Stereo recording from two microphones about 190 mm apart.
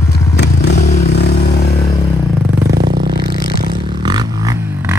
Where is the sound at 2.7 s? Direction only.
65° right (ahead or behind).